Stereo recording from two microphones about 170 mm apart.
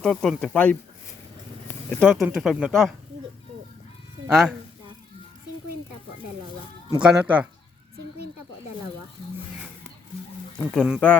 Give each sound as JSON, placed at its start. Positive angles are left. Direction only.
{"t": 0.0, "sound": "speech", "side_deg": 5}
{"t": 1.9, "sound": "speech", "side_deg": 5}
{"t": 4.3, "sound": "speech", "side_deg": -5}
{"t": 7.0, "sound": "speech", "side_deg": -5}
{"t": 10.8, "sound": "speech", "side_deg": -5}